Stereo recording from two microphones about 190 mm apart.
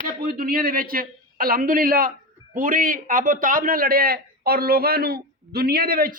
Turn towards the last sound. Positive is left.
turn(degrees=-50)  # may be behind; listen again after turning